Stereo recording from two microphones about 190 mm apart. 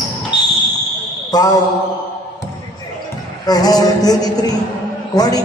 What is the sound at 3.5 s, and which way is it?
A woman's voice, 20° left (ahead or behind).